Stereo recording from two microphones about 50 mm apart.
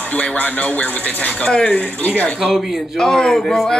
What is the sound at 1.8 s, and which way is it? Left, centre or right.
Speech, left.